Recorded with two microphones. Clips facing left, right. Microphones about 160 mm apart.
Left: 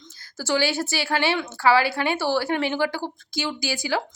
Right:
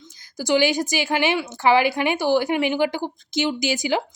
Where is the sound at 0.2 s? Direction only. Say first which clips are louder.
Right 4 dB; 15° right (ahead or behind).